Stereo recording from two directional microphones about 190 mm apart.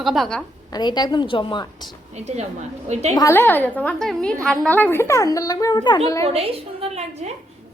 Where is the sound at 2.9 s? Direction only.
35° right (ahead or behind).